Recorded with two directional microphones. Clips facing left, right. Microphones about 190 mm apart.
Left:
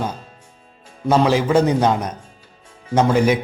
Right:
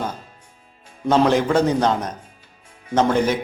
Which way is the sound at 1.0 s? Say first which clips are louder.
Even; 5° left (ahead or behind).